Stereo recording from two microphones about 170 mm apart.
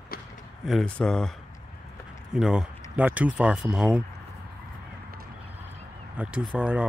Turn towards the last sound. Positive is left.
turn(degrees=-5)  # may be behind; listen again after turning